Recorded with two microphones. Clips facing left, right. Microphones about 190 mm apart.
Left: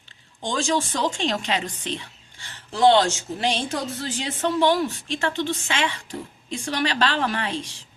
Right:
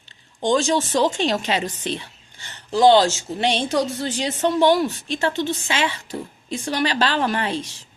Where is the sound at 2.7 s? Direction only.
Centre (ahead or behind).